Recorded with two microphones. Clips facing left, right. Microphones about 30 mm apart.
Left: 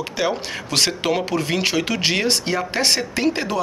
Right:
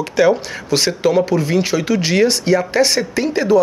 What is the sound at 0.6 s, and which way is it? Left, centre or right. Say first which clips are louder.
Speech: right 4 dB; left.